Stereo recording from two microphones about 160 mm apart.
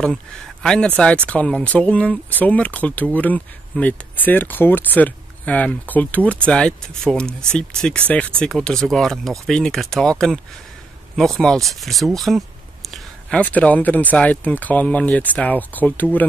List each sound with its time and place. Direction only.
0.0 s speech: 5° left (ahead or behind)